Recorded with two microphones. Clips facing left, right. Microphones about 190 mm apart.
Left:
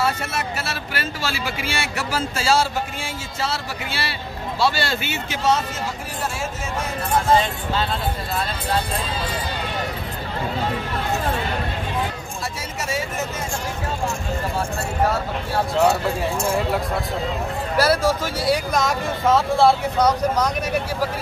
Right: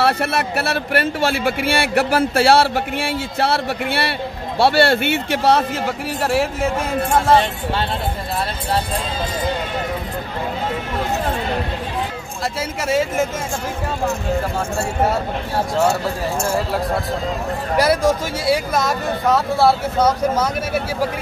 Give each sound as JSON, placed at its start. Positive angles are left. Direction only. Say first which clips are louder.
{"t": 0.0, "sound": "speech", "louder": "right 5 dB", "side_deg": -65}
{"t": 17.7, "sound": "speech", "louder": "right 3 dB", "side_deg": -15}